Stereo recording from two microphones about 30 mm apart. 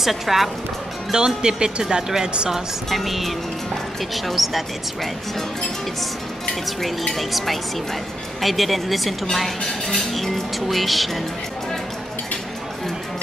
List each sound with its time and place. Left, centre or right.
0.0 s speech: centre
1.1 s speech: right
2.9 s speech: centre
7.2 s speech: centre